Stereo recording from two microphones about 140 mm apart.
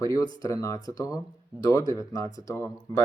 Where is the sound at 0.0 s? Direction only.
25° left (ahead or behind).